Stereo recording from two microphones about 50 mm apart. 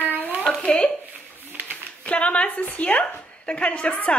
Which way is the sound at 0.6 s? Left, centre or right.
Left.